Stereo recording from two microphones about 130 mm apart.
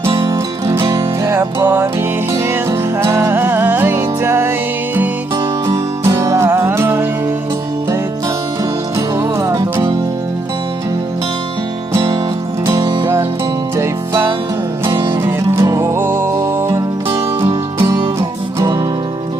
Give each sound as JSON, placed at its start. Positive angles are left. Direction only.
{"t": 0.3, "sound": "music", "side_deg": -25}
{"t": 5.6, "sound": "music", "side_deg": -25}
{"t": 9.0, "sound": "music", "side_deg": -25}
{"t": 12.6, "sound": "music", "side_deg": -25}
{"t": 15.6, "sound": "music", "side_deg": -25}